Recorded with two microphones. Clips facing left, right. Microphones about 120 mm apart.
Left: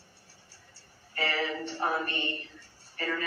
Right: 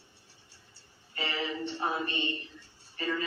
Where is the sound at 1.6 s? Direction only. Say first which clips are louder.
Left 2 dB; 20° right (ahead or behind).